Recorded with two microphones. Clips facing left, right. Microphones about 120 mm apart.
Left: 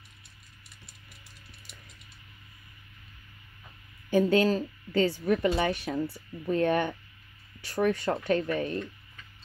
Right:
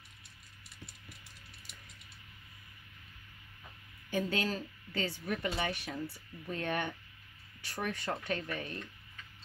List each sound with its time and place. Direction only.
4.1 s speech: 35° left (ahead or behind)